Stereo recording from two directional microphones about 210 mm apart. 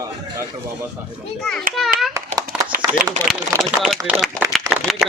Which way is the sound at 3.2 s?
35° right (ahead or behind).